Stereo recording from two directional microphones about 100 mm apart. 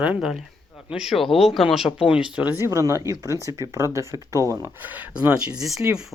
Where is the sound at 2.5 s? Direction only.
30° right (ahead or behind).